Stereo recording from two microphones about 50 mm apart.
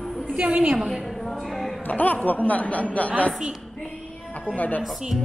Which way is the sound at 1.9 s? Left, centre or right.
Left.